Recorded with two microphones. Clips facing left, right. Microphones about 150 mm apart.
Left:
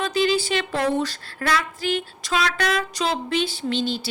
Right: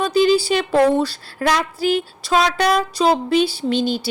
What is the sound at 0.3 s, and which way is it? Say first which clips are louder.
A woman's voice: right 6 dB; 35° right (ahead or behind).